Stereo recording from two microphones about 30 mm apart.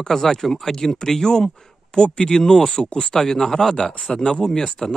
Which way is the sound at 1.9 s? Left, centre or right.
Left.